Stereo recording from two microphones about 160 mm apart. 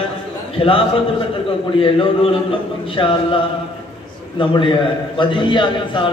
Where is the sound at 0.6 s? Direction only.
35° left (ahead or behind).